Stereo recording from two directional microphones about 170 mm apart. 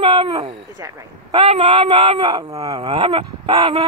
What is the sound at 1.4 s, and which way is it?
Speech, 35° right (ahead or behind).